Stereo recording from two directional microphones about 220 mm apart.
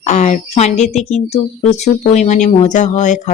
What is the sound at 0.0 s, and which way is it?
A woman's voice, 30° left (ahead or behind).